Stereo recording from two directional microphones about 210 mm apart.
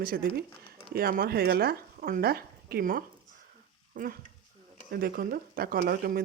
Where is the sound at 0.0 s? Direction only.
45° right (ahead or behind).